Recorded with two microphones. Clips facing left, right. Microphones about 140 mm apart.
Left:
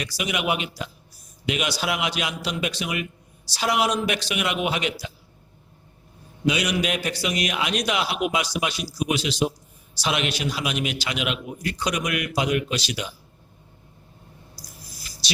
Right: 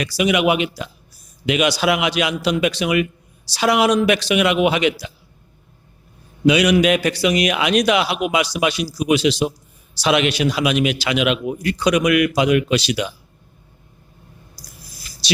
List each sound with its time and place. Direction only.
0.0 s a man's voice: 90° right
6.4 s a man's voice: 85° right
15.2 s hum: 75° right (ahead or behind)